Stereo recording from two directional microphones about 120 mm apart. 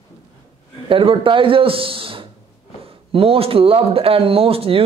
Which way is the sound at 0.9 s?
45° right (ahead or behind).